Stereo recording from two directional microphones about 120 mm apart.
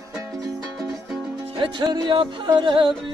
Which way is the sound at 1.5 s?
40° right (ahead or behind).